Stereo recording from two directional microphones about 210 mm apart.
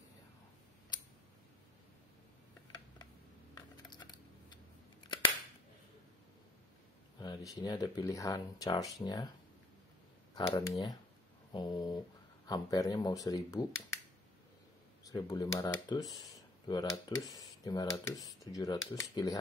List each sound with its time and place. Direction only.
3.5 s computer keyboard: 20° left (ahead or behind)
7.2 s speech: 20° left (ahead or behind)
10.3 s speech: 20° left (ahead or behind)
15.0 s speech: 20° left (ahead or behind)